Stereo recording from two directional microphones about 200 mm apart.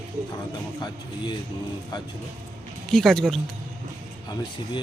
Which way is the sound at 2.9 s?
Centre (ahead or behind).